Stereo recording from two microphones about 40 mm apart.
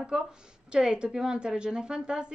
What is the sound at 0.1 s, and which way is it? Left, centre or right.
A woman's voice, centre.